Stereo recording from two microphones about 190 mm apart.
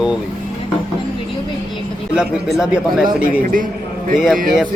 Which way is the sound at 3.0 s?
45° right (ahead or behind).